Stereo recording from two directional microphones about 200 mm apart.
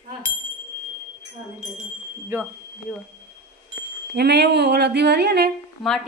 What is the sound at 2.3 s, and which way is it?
Speech, 10° right (ahead or behind).